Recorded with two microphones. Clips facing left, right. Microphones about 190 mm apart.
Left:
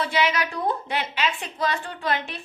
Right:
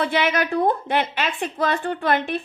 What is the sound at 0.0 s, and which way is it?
A woman's voice, 50° right (ahead or behind).